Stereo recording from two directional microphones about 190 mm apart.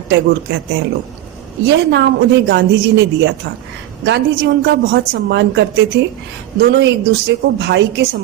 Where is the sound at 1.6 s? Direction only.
65° right (ahead or behind).